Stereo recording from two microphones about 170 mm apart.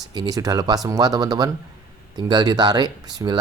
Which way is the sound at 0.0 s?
25° right (ahead or behind).